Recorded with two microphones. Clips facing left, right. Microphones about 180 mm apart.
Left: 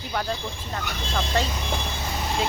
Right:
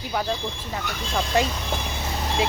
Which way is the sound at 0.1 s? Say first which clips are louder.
Right 2 dB; 5° right (ahead or behind).